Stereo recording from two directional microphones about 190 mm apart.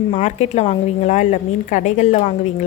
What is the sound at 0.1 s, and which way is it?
Speech, 40° left (ahead or behind).